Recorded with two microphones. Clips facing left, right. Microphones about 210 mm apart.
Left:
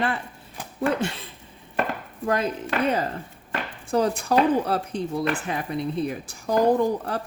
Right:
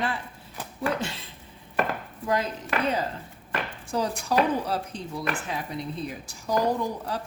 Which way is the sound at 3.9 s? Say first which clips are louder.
Left 5 dB; 55° left (ahead or behind).